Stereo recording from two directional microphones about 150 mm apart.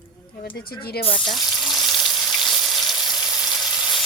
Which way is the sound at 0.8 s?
90° left.